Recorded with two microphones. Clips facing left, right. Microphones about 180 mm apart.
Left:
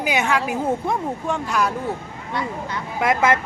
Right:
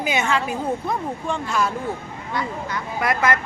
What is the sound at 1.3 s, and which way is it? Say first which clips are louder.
Speech: left 1 dB; 10° left (ahead or behind).